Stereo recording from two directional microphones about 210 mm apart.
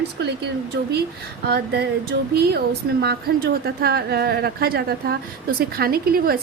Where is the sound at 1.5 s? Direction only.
50° right (ahead or behind).